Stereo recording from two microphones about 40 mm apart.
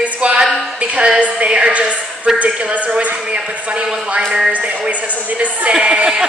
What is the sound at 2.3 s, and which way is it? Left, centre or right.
Speech, centre.